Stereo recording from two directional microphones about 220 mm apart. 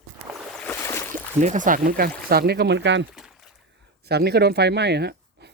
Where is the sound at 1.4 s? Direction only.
35° right (ahead or behind); by 3.1 s 55° right (ahead or behind).